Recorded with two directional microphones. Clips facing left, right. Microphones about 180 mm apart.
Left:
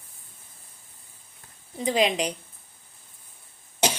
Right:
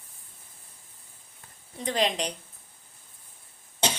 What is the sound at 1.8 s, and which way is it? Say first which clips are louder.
Speech: left 4 dB; 5° left (ahead or behind).